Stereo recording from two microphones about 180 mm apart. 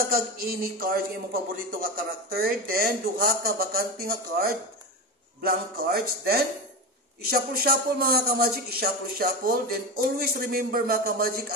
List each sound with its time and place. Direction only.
0.1 s a man's voice: 55° right (ahead or behind)